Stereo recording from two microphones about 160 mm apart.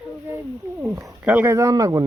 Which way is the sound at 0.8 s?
15° right (ahead or behind).